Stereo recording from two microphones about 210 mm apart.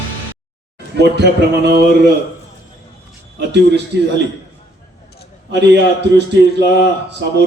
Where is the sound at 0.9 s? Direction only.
55° right (ahead or behind).